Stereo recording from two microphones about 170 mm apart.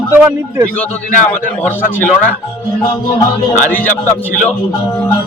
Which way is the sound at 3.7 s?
10° left (ahead or behind).